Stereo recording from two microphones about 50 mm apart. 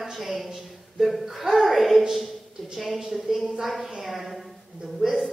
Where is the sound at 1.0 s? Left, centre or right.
Centre.